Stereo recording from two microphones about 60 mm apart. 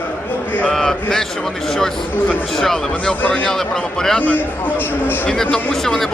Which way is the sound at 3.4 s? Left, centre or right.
Centre.